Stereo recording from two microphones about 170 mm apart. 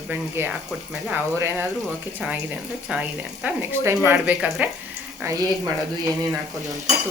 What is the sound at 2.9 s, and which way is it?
Speech, 5° right (ahead or behind).